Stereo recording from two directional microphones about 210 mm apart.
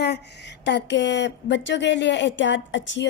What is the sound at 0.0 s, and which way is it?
A woman's voice, 55° left (ahead or behind).